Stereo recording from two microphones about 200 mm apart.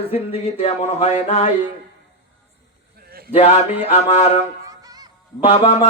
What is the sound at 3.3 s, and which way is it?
Speech, 30° left (ahead or behind).